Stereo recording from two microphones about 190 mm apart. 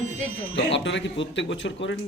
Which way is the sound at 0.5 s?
70° left (ahead or behind).